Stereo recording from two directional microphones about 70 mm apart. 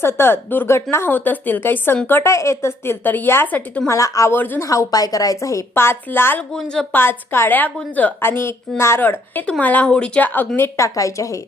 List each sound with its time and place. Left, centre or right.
0.0 s a woman's voice: left
2.3 s a woman's voice: left
3.8 s a woman's voice: left
4.3 s speech: left
4.6 s a woman's voice: left
5.7 s a woman's voice: left
6.5 s speech: centre
6.9 s a woman's voice: left; by 10.1 s centre
10.2 s speech: left
10.8 s a woman's voice: left